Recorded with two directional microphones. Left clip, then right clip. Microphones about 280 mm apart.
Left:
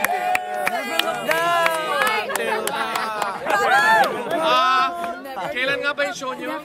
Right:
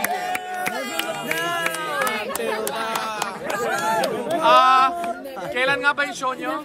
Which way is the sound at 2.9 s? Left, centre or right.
Right.